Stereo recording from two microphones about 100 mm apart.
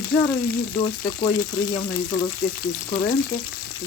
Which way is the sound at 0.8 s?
55° left (ahead or behind).